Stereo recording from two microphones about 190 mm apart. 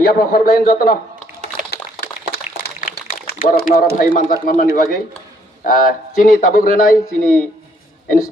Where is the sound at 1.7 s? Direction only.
55° left (ahead or behind).